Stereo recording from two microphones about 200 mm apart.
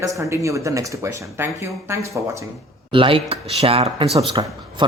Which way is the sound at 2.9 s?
25° right (ahead or behind).